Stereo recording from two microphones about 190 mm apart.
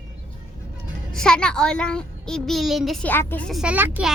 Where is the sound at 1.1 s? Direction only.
5° left (ahead or behind).